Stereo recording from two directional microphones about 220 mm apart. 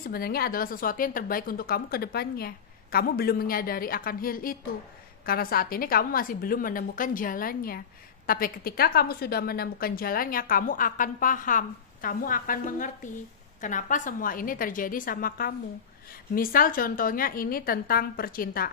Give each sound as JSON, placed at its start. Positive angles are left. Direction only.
{"t": 0.0, "sound": "a woman's voice", "side_deg": 45}